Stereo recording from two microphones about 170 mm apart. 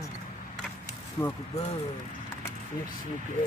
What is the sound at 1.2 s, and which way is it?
Speech, 15° left (ahead or behind).